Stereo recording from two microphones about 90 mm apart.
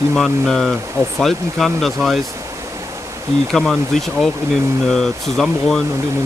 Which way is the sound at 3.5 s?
5° left (ahead or behind).